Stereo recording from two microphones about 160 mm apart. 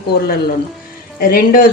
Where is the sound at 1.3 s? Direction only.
60° left (ahead or behind).